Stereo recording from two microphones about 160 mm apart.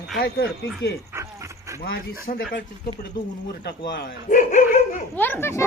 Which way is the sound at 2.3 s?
55° left (ahead or behind).